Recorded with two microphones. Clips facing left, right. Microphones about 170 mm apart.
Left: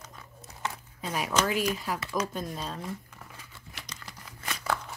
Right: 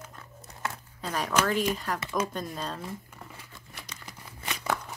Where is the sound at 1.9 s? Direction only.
20° right (ahead or behind).